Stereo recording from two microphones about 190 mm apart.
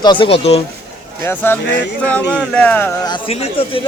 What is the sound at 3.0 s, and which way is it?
Speech, 25° left (ahead or behind).